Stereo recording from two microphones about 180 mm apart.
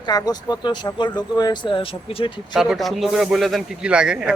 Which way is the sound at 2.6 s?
Centre (ahead or behind).